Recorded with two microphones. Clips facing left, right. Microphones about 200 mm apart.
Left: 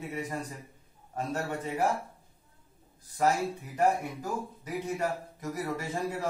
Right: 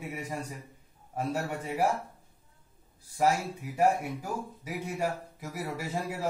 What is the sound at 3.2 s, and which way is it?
Speech, 10° right (ahead or behind).